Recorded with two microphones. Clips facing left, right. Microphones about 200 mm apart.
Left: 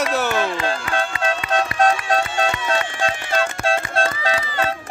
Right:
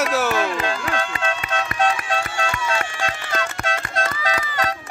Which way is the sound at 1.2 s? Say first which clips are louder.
Left 4 dB; 35° left (ahead or behind).